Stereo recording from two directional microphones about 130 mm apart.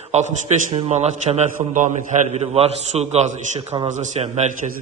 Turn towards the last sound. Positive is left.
turn(degrees=-60)  # may be behind; listen again after turning